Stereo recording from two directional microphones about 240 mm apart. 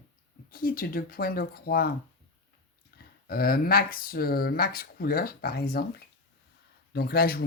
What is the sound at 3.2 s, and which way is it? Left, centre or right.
Speech, left.